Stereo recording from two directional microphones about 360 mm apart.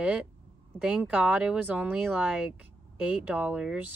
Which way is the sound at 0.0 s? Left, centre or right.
Centre.